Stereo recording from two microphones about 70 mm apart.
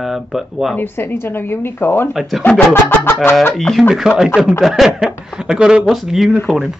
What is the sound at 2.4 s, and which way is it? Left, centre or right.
Speech, left.